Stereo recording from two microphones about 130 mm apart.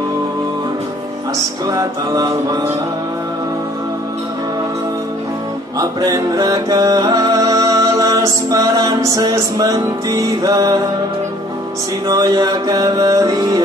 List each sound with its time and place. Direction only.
1.7 s music: 30° right (ahead or behind)
5.8 s music: 25° right (ahead or behind)
12.1 s music: 30° right (ahead or behind)